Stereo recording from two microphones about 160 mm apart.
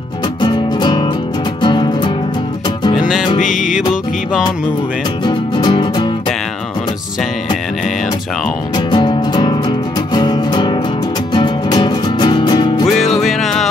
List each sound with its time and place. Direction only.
0.4 s music: 25° left (ahead or behind)
3.3 s music: 50° left (ahead or behind)
5.2 s music: 30° left (ahead or behind)
8.7 s music: 30° left (ahead or behind)
12.9 s music: 45° left (ahead or behind)
13.2 s music: centre (ahead or behind)